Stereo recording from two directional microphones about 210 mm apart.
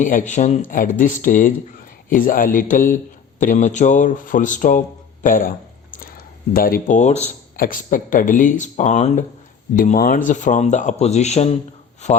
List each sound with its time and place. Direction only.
0.0 s speech: 40° left (ahead or behind)